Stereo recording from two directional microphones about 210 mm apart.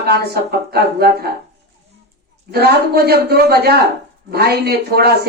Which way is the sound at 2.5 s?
50° right (ahead or behind).